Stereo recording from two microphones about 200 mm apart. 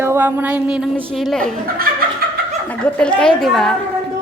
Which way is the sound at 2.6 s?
5° left (ahead or behind).